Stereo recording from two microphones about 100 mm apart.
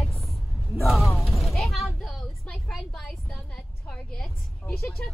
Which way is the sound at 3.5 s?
5° left (ahead or behind).